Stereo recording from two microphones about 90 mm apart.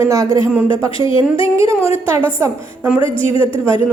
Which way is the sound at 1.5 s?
35° right (ahead or behind).